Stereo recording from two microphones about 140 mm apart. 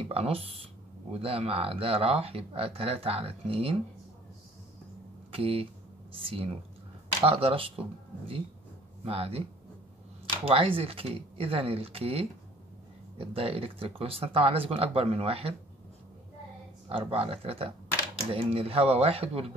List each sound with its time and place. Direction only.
0.0 s speech: 45° right (ahead or behind)
5.3 s speech: 45° right (ahead or behind)
9.0 s speech: 45° right (ahead or behind)
10.4 s speech: 40° right (ahead or behind)
16.9 s speech: 40° right (ahead or behind)